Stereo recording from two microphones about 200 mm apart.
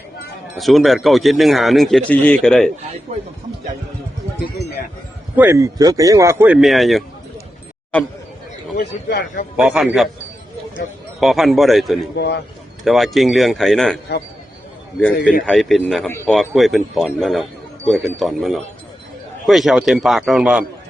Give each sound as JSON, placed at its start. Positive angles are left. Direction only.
{"t": 0.5, "sound": "speech", "side_deg": 0}
{"t": 5.4, "sound": "speech", "side_deg": -15}
{"t": 8.8, "sound": "a man's voice", "side_deg": 55}
{"t": 9.6, "sound": "speech", "side_deg": -5}
{"t": 11.2, "sound": "speech", "side_deg": 0}
{"t": 12.1, "sound": "a man's voice", "side_deg": 55}
{"t": 12.8, "sound": "speech", "side_deg": 0}